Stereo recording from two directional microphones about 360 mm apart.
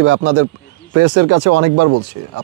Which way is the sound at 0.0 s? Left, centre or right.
Right.